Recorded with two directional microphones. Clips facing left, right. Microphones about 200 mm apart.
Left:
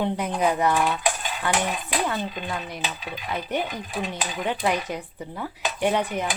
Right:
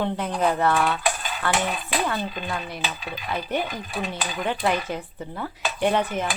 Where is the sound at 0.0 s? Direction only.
15° left (ahead or behind).